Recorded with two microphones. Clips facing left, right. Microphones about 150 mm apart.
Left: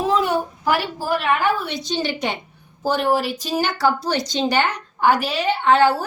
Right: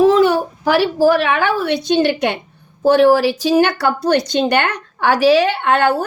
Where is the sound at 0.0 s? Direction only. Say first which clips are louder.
Right 8 dB; 85° right; by 2.4 s 60° right (ahead or behind).